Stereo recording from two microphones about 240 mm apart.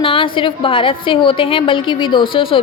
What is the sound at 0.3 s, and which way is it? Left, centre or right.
A woman's voice, left.